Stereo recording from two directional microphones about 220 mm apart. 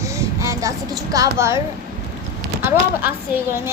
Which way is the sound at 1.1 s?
15° right (ahead or behind).